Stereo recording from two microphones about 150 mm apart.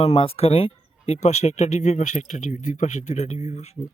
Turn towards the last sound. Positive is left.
turn(degrees=45)  # may be behind; listen again after turning